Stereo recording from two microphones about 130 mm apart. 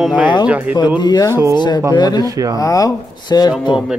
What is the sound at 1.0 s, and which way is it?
Speech, 30° left (ahead or behind).